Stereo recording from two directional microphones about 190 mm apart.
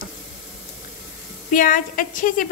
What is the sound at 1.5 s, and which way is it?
Speech, 45° left (ahead or behind).